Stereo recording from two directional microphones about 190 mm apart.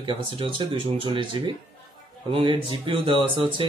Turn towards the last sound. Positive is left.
turn(degrees=-25)  # may be behind; listen again after turning